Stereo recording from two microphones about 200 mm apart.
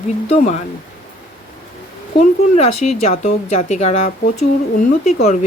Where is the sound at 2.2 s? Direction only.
35° left (ahead or behind).